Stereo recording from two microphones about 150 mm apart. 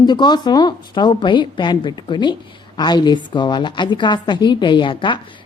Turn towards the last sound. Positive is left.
turn(degrees=35)  # may be behind; listen again after turning